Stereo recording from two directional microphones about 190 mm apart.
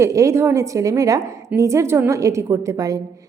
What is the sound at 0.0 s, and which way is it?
A woman's voice, 15° right (ahead or behind).